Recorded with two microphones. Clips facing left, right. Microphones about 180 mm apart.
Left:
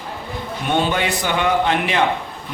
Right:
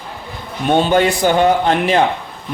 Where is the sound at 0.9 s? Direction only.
40° right (ahead or behind).